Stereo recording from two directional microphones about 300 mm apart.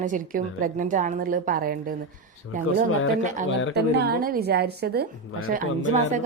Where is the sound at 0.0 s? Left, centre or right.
Right.